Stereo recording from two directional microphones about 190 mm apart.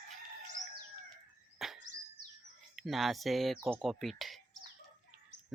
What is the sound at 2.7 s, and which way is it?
Speech, centre (ahead or behind).